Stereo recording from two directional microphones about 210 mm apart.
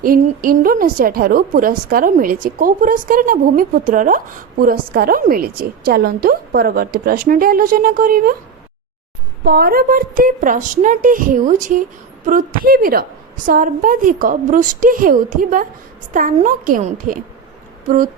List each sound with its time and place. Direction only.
0.0 s a woman's voice: 45° right (ahead or behind)
9.4 s a woman's voice: 45° right (ahead or behind)